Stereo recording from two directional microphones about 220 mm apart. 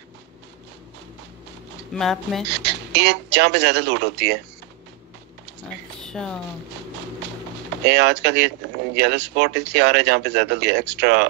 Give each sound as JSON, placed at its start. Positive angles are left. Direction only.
{"t": 2.0, "sound": "speech", "side_deg": 0}
{"t": 2.5, "sound": "speech", "side_deg": -50}
{"t": 6.0, "sound": "a sound", "side_deg": 5}
{"t": 7.8, "sound": "speech", "side_deg": -50}